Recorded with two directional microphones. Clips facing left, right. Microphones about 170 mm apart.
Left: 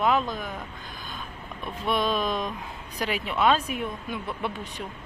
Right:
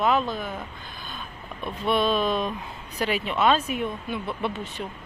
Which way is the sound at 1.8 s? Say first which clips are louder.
Right 3 dB; 10° left (ahead or behind).